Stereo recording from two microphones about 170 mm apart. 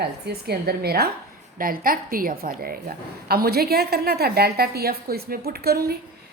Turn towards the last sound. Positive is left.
turn(degrees=-65)  # may be behind; listen again after turning